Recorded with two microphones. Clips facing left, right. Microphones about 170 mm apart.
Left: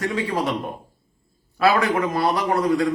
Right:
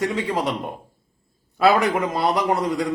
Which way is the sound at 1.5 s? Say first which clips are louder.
Right 1 dB; 20° right (ahead or behind).